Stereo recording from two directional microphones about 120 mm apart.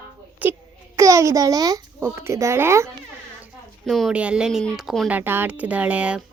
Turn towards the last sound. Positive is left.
turn(degrees=-10)  # may be behind; listen again after turning